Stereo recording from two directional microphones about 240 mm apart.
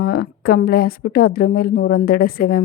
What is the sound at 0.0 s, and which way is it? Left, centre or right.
A woman's voice, left.